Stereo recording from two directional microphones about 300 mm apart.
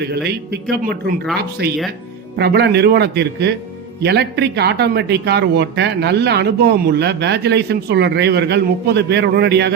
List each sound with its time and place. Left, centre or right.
0.8 s speech: right